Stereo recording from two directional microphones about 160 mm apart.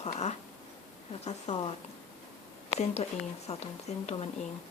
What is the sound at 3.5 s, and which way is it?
Speech, 40° left (ahead or behind).